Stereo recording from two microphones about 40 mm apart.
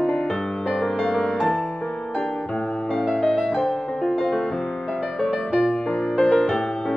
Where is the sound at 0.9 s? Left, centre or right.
Left.